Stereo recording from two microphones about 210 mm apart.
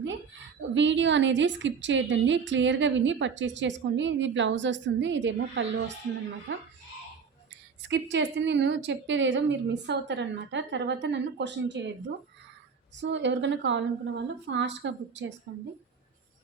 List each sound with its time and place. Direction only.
0.7 s a woman's voice: 60° right (ahead or behind)
7.8 s a woman's voice: 60° right (ahead or behind)
13.0 s a woman's voice: 60° right (ahead or behind)